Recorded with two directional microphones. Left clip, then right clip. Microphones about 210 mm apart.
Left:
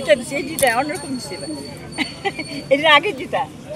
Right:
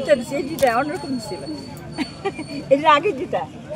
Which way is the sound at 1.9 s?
45° right (ahead or behind).